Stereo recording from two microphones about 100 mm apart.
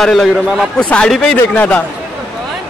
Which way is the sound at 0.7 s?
10° left (ahead or behind).